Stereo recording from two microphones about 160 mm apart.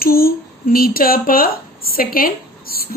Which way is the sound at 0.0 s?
70° left (ahead or behind).